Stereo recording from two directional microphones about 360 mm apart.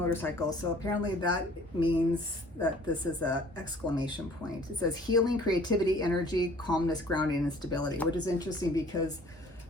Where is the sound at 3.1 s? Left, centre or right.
Centre.